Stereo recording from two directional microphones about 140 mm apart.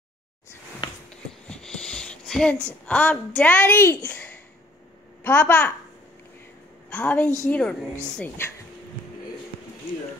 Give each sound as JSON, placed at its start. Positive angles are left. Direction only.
{"t": 1.5, "sound": "wheeze", "side_deg": 5}
{"t": 2.9, "sound": "a woman's voice", "side_deg": 10}
{"t": 6.9, "sound": "a woman's voice", "side_deg": 10}